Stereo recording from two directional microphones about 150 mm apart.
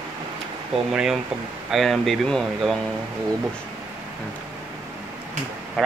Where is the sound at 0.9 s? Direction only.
5° right (ahead or behind).